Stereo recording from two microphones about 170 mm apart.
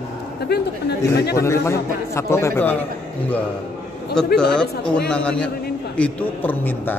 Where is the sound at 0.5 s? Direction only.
70° left (ahead or behind).